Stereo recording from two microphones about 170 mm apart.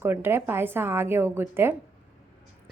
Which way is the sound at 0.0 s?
15° right (ahead or behind).